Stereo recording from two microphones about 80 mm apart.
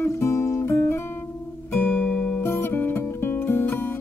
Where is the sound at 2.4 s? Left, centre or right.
Left.